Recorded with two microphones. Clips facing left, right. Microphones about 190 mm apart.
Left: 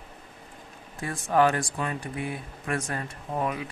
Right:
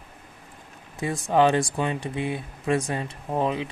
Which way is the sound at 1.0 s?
20° right (ahead or behind).